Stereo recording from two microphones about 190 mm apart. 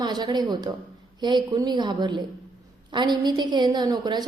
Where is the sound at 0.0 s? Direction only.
20° right (ahead or behind).